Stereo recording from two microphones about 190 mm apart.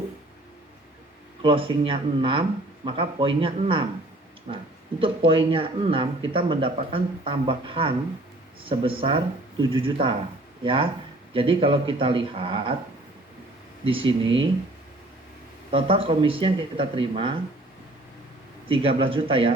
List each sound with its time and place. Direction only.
1.4 s speech: 25° right (ahead or behind)
14.0 s speech: 80° right
15.7 s speech: 30° right (ahead or behind)
18.7 s speech: 30° right (ahead or behind)